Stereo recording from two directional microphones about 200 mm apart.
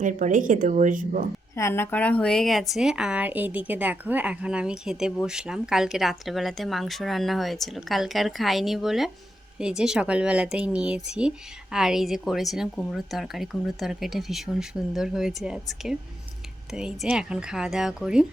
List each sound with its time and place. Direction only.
0.0 s a woman's voice: 40° right (ahead or behind)
1.5 s a woman's voice: 10° left (ahead or behind); by 18.3 s 5° right (ahead or behind)